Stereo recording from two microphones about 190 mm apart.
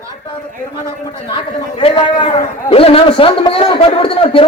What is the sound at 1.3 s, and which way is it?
A man's voice, 25° left (ahead or behind).